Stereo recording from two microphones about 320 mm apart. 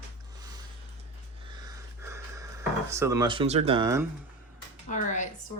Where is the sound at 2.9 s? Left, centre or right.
Centre.